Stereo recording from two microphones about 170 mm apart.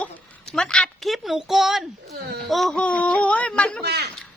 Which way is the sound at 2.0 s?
65° right (ahead or behind).